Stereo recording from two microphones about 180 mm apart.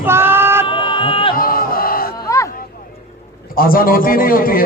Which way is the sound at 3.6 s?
55° left (ahead or behind).